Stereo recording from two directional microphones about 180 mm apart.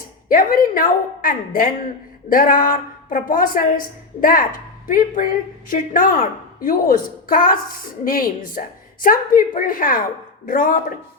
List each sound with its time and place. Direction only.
0.3 s a woman's voice: 50° left (ahead or behind)